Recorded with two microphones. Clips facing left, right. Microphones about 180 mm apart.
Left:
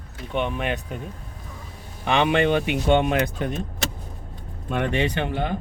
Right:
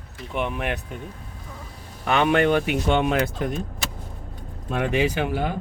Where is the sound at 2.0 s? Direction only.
20° left (ahead or behind).